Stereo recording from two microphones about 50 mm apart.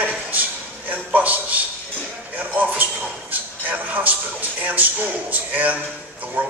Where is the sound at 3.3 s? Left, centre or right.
Right.